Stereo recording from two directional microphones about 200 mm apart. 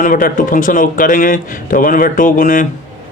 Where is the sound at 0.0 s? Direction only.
45° left (ahead or behind).